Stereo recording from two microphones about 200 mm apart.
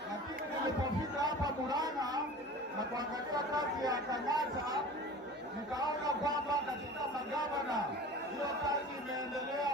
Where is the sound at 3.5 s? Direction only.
20° right (ahead or behind).